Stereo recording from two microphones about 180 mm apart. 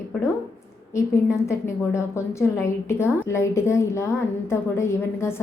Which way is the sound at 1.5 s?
15° left (ahead or behind).